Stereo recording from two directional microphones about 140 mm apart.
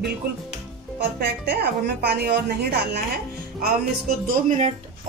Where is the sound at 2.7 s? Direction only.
90° right.